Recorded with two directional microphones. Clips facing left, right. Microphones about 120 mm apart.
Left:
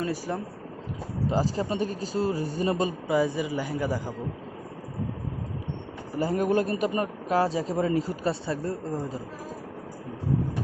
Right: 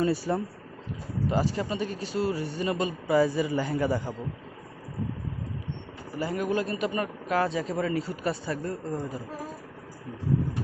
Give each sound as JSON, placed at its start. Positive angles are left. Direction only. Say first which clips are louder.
{"t": 0.3, "sound": "speech", "louder": "right 3 dB", "side_deg": 0}
{"t": 1.3, "sound": "a man's voice", "louder": "left 1 dB", "side_deg": 35}
{"t": 3.1, "sound": "a man's voice", "louder": "right 3 dB", "side_deg": 15}
{"t": 6.1, "sound": "a man's voice", "louder": "left 4 dB", "side_deg": 45}